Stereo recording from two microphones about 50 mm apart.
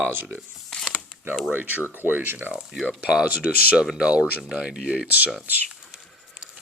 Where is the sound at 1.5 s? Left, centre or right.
Right.